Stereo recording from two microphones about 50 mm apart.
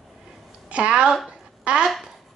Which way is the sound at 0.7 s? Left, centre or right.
Right.